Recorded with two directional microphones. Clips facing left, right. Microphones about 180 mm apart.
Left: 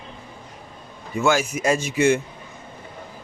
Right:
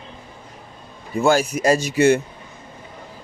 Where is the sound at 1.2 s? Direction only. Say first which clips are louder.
Right 3 dB; 35° right (ahead or behind).